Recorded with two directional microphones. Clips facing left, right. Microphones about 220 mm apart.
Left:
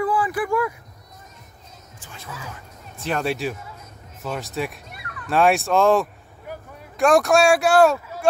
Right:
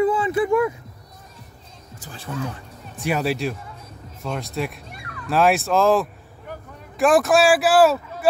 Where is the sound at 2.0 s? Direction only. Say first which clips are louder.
Right 4 dB; 35° right (ahead or behind).